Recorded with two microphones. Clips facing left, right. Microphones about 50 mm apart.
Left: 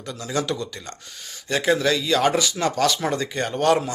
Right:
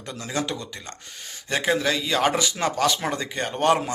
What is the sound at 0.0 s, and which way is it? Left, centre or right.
Speech, right.